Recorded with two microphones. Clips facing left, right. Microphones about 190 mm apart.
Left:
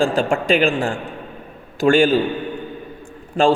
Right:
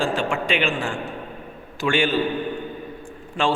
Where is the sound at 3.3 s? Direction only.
40° left (ahead or behind).